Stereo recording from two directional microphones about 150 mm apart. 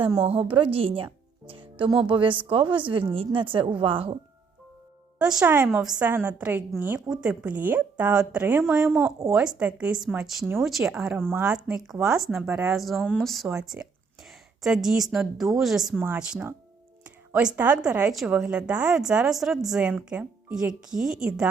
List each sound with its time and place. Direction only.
0.2 s a woman's voice: 40° right (ahead or behind)
5.2 s a woman's voice: 5° right (ahead or behind)